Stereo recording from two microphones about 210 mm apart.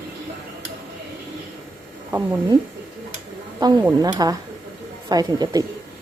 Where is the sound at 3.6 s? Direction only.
20° right (ahead or behind).